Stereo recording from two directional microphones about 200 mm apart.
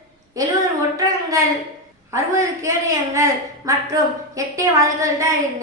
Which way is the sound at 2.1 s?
15° right (ahead or behind).